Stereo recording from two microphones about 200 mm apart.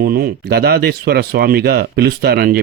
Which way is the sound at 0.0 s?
50° right (ahead or behind).